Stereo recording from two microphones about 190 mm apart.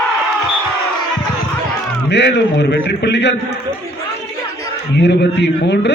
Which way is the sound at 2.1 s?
65° left (ahead or behind).